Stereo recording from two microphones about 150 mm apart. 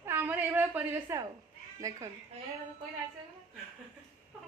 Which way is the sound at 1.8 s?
20° right (ahead or behind).